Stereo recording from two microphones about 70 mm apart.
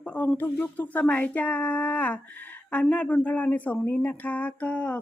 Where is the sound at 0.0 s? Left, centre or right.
Centre.